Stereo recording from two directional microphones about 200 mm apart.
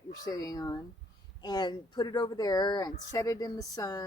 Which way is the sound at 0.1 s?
20° left (ahead or behind).